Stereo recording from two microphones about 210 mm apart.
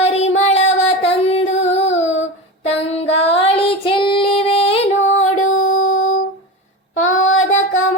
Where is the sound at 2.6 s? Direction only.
30° left (ahead or behind).